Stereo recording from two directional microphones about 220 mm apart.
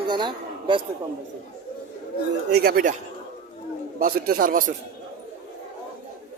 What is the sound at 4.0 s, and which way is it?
Speech, 40° right (ahead or behind).